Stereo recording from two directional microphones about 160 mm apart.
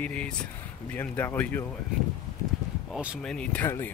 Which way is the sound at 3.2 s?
5° left (ahead or behind).